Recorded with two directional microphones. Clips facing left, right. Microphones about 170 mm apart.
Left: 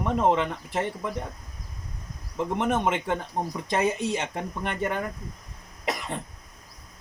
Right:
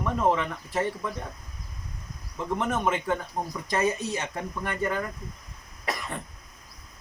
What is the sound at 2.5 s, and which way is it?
Speech, 25° left (ahead or behind).